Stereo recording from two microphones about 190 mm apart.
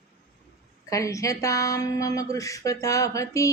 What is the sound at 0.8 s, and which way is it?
Speech, 15° left (ahead or behind).